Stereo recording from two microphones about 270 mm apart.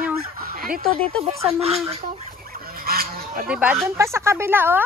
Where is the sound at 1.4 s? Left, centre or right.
Right.